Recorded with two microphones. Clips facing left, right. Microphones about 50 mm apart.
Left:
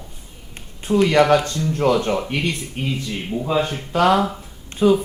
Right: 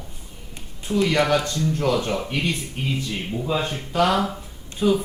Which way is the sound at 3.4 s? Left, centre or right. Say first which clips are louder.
Left 4 dB; left.